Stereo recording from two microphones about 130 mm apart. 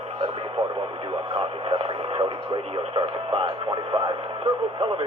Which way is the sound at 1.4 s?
45° right (ahead or behind).